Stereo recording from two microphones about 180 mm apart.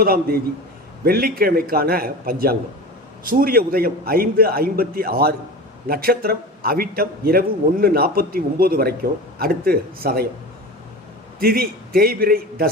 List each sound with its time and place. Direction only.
0.0 s a man's voice: 55° right (ahead or behind)
11.3 s a man's voice: 55° right (ahead or behind)